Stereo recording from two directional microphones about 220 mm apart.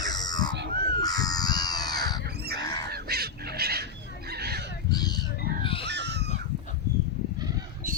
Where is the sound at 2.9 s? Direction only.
45° right (ahead or behind).